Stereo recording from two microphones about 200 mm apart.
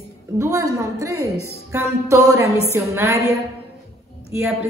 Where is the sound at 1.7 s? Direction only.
15° right (ahead or behind).